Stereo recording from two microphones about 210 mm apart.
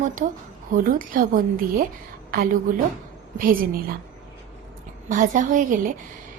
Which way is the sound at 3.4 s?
45° right (ahead or behind).